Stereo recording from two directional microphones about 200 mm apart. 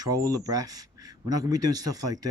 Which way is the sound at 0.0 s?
20° right (ahead or behind).